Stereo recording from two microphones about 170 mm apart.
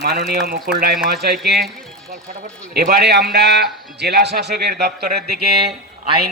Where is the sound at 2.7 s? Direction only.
65° right (ahead or behind).